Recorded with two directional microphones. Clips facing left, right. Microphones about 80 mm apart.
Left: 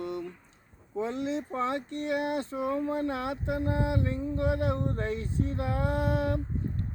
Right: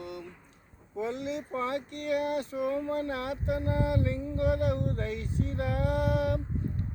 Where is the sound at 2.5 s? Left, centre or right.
Left.